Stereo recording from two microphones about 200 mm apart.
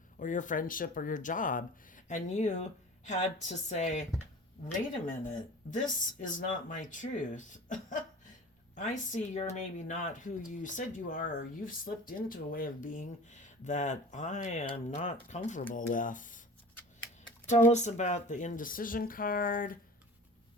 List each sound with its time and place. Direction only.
0.2 s speech: 40° left (ahead or behind)
5.3 s speech: 40° left (ahead or behind)
17.5 s speech: 35° left (ahead or behind)